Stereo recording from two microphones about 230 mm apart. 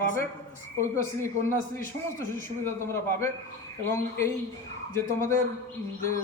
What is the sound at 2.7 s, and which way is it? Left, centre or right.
Speech, centre.